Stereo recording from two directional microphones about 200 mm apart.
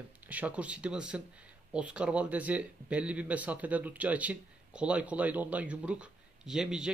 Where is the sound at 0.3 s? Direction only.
5° right (ahead or behind).